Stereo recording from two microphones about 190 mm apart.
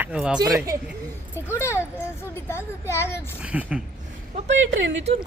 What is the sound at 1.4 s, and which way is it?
Speech, 15° left (ahead or behind).